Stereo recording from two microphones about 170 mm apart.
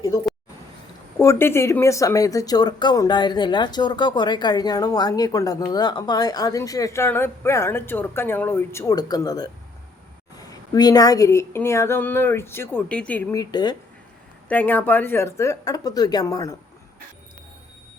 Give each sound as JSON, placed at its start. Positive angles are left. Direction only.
{"t": 1.2, "sound": "speech", "side_deg": 15}
{"t": 13.3, "sound": "speech", "side_deg": 25}
{"t": 14.4, "sound": "speech", "side_deg": 10}